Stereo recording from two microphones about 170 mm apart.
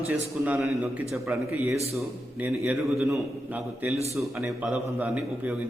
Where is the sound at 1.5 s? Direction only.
10° right (ahead or behind).